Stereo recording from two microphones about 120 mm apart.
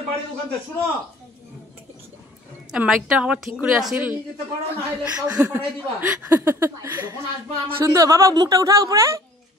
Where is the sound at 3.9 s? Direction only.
15° right (ahead or behind).